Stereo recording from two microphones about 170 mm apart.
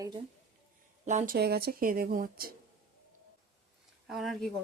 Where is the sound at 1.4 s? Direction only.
65° right (ahead or behind).